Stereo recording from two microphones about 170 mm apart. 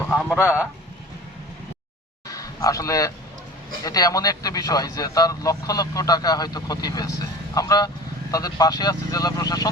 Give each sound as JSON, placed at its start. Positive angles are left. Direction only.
{"t": 0.1, "sound": "speech", "side_deg": -5}
{"t": 2.2, "sound": "a sound", "side_deg": 20}
{"t": 3.8, "sound": "speech", "side_deg": 20}